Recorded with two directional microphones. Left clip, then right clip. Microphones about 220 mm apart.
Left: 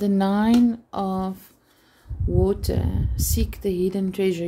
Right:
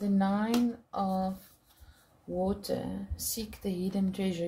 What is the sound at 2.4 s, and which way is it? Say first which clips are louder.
Speech: left 7 dB; 35° left (ahead or behind).